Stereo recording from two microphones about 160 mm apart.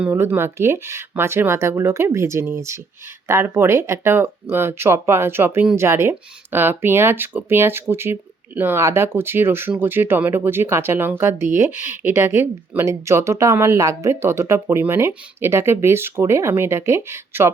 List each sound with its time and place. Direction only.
0.0 s speech: 10° right (ahead or behind)